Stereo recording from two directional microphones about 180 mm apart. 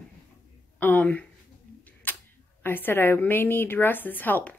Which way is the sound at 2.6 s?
10° left (ahead or behind).